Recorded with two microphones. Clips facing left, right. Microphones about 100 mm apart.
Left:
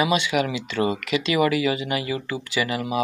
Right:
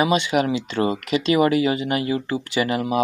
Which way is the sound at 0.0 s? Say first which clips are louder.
Right 2 dB; 45° right (ahead or behind).